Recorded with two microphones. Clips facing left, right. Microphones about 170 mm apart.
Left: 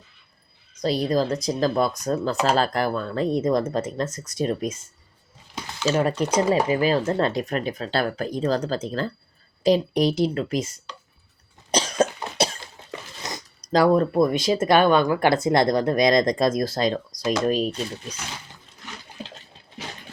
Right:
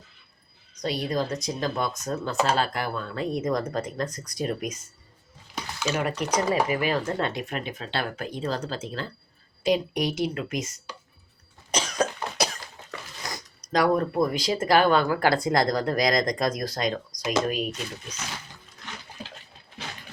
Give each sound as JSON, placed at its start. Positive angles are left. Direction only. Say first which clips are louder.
{"t": 0.8, "sound": "speech", "louder": "left 5 dB", "side_deg": 35}
{"t": 11.7, "sound": "cough", "louder": "left 5 dB", "side_deg": 30}
{"t": 13.6, "sound": "speech", "louder": "left 5 dB", "side_deg": 30}